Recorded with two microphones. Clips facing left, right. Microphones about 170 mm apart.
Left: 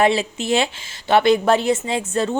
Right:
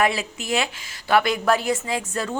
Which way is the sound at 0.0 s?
25° left (ahead or behind).